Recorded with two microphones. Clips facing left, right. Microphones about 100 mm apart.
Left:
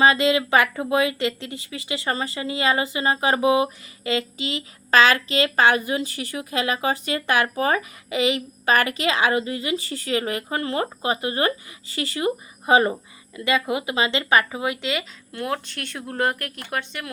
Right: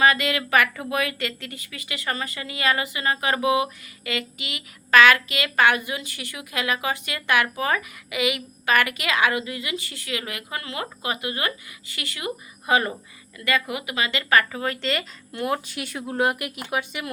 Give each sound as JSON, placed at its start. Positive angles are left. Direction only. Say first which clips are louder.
{"t": 0.0, "sound": "a woman's voice", "louder": "left 3 dB", "side_deg": 25}